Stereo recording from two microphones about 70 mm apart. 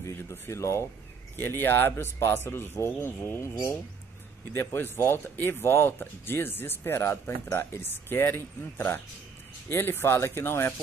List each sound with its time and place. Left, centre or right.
0.0 s speech: left
1.3 s speech: left